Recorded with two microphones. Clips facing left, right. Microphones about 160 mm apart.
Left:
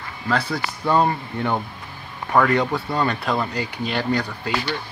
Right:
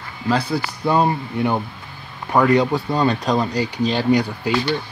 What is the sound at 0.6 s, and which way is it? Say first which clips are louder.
Speech: right 1 dB; 10° right (ahead or behind).